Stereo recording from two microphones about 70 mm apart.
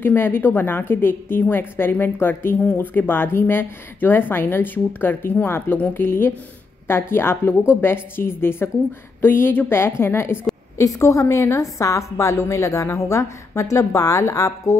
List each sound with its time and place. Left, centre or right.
0.0 s a woman's voice: left
10.8 s a woman's voice: left